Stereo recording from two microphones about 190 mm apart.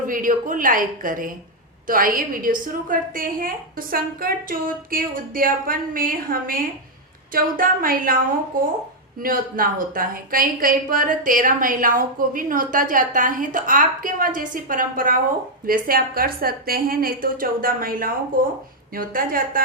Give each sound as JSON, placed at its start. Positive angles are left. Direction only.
{"t": 0.1, "sound": "a woman's voice", "side_deg": -45}